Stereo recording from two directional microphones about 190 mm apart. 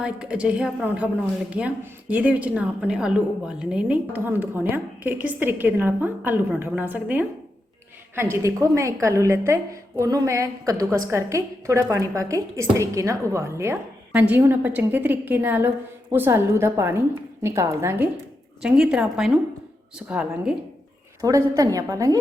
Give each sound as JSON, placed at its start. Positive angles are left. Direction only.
{"t": 0.0, "sound": "a woman's voice", "side_deg": -5}
{"t": 21.2, "sound": "a woman's voice", "side_deg": -15}